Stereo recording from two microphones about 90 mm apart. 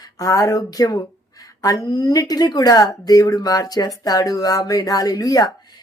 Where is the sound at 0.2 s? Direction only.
40° left (ahead or behind).